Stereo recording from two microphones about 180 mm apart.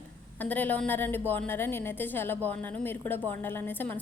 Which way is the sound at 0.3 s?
10° left (ahead or behind).